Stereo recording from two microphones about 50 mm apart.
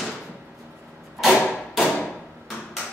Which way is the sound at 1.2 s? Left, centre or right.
Centre.